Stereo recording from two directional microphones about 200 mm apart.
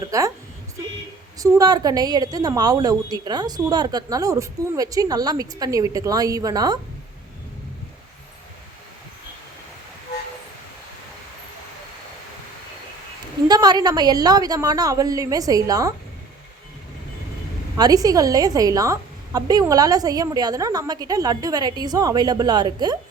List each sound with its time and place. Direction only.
0.0 s a woman's voice: 15° right (ahead or behind)
1.4 s a woman's voice: 20° right (ahead or behind)
13.5 s a woman's voice: 20° right (ahead or behind)
17.7 s a woman's voice: 20° right (ahead or behind)